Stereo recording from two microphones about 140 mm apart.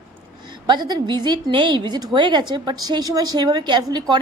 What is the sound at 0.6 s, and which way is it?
A woman's voice, 30° right (ahead or behind).